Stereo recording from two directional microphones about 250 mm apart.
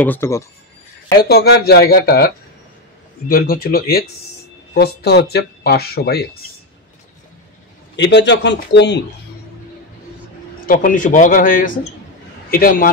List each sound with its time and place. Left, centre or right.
0.0 s speech: centre
1.1 s speech: left
7.9 s a man's voice: left
10.7 s speech: left